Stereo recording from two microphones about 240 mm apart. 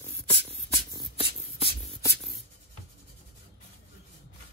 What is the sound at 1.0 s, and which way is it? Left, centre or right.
Beatboxing, left.